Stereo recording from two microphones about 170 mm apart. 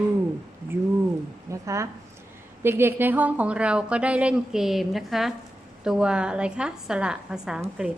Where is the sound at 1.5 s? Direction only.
20° right (ahead or behind).